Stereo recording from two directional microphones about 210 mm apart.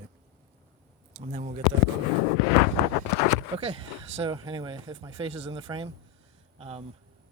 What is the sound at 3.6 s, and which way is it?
Speech, 30° right (ahead or behind).